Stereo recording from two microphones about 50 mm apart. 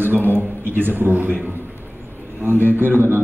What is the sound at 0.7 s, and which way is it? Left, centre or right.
Speech, right.